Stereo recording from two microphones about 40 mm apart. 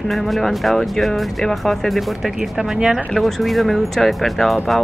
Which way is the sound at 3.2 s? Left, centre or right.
Centre.